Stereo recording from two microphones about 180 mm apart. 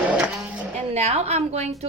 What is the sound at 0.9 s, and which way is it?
Speech, 35° right (ahead or behind).